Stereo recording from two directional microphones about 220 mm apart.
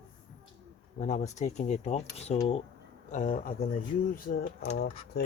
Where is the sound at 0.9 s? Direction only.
30° left (ahead or behind).